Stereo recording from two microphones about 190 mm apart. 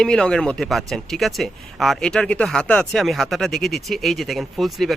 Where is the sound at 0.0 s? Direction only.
5° left (ahead or behind).